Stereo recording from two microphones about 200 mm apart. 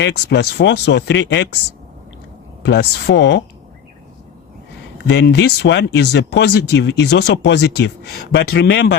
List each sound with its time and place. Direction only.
0.0 s speech: 60° left (ahead or behind)
2.6 s speech: 60° left (ahead or behind)
5.0 s speech: 60° left (ahead or behind)